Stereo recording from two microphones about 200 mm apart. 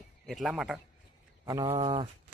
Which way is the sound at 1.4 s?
25° right (ahead or behind).